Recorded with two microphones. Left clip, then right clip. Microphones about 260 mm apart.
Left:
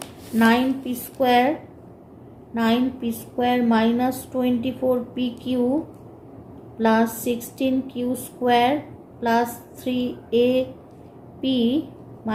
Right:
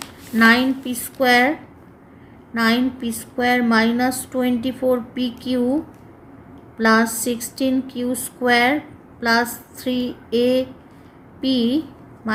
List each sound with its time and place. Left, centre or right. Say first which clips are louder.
0.3 s speech: right 4 dB; right
2.6 s speech: right 3 dB; right
6.7 s a woman's voice: right 3 dB; right